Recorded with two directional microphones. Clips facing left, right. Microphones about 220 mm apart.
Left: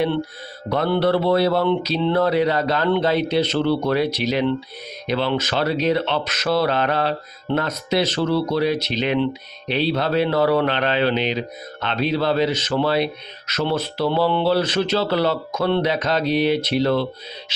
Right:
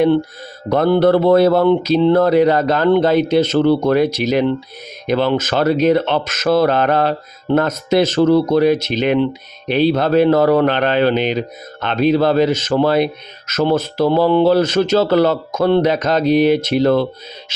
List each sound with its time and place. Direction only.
0.7 s speech: 45° right (ahead or behind)